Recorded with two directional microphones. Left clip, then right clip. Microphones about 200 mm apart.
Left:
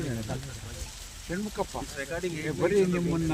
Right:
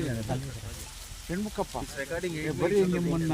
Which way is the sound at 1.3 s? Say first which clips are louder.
Even; 10° right (ahead or behind).